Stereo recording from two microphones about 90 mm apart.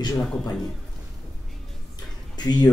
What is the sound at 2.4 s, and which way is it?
Speech, 50° left (ahead or behind).